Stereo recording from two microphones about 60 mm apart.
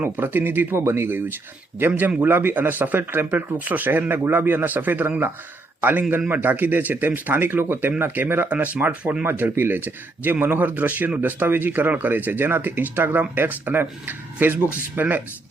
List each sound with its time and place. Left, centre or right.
0.0 s speech: right
2.2 s speech: right